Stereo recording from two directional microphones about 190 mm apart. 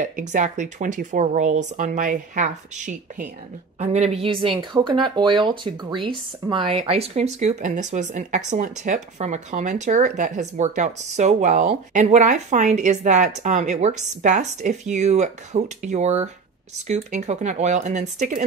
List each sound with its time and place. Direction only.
0.0 s speech: 40° right (ahead or behind)